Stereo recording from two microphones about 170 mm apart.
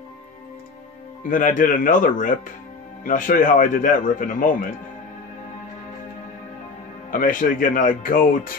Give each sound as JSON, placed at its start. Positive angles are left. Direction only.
{"t": 1.2, "sound": "speech", "side_deg": 50}
{"t": 7.1, "sound": "speech", "side_deg": 55}